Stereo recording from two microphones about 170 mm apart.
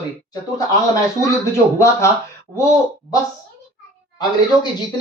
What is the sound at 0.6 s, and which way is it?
Speech, 20° left (ahead or behind).